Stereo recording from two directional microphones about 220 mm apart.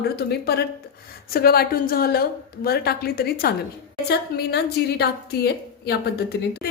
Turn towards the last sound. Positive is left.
turn(degrees=45)  # may be behind; listen again after turning